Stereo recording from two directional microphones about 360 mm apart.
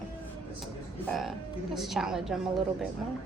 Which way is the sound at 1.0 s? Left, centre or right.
Centre.